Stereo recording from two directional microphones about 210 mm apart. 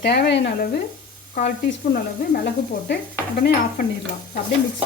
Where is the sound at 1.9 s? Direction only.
50° left (ahead or behind).